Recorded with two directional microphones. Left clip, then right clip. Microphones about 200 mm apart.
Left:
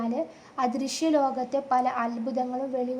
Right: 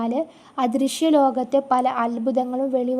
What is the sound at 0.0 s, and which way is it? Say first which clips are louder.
A woman's voice: right 5 dB; 35° right (ahead or behind).